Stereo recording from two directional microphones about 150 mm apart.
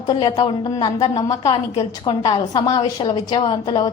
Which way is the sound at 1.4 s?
45° left (ahead or behind).